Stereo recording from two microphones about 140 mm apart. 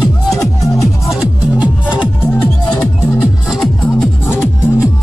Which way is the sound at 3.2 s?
Centre (ahead or behind).